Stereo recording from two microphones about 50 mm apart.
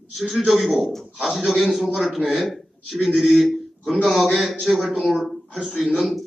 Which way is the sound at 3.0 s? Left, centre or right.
Centre.